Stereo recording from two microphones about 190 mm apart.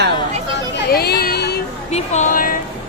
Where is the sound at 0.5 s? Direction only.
55° left (ahead or behind).